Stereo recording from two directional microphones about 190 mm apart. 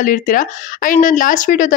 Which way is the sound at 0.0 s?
45° left (ahead or behind).